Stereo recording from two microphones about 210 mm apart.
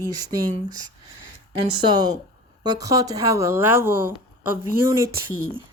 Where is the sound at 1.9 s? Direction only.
20° right (ahead or behind).